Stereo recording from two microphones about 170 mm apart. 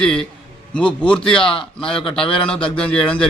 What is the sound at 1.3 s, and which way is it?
Speech, 30° left (ahead or behind).